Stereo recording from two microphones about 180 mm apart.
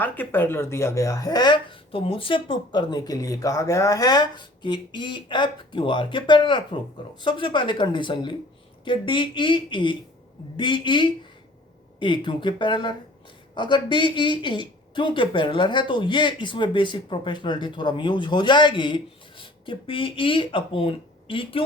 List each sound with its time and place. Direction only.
0.0 s speech: 10° left (ahead or behind); by 21.6 s 30° left (ahead or behind)